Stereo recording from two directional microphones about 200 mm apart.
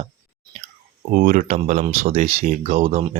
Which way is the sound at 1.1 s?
45° right (ahead or behind).